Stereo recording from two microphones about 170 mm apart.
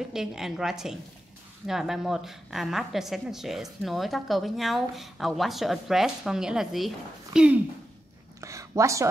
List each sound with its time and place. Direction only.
0.1 s a woman's voice: centre (ahead or behind)
8.4 s speech: 20° right (ahead or behind)